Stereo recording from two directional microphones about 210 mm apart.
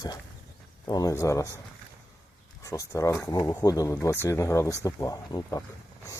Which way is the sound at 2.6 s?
15° left (ahead or behind).